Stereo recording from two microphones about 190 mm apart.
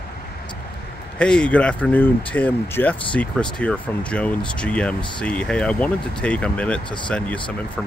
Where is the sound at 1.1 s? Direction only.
5° left (ahead or behind).